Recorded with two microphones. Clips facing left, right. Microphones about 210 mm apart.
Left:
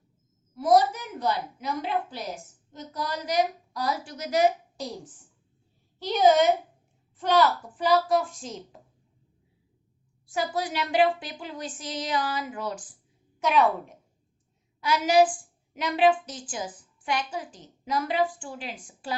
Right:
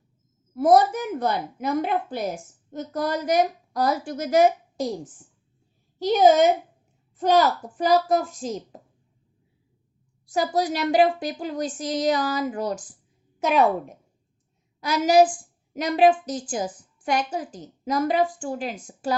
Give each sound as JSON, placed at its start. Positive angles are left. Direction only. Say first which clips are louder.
{"t": 0.5, "sound": "a woman's voice", "louder": "right 4 dB", "side_deg": -50}
{"t": 6.0, "sound": "a woman's voice", "louder": "right 4 dB", "side_deg": -45}
{"t": 10.3, "sound": "a woman's voice", "louder": "right 5 dB", "side_deg": -40}
{"t": 14.8, "sound": "a woman's voice", "louder": "right 3 dB", "side_deg": -40}